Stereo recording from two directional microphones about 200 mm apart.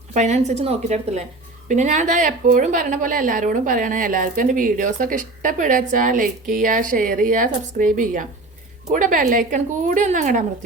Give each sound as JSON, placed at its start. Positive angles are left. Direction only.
{"t": 0.1, "sound": "a woman's voice", "side_deg": -35}